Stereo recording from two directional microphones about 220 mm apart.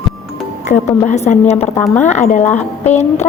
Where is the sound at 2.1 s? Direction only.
30° left (ahead or behind).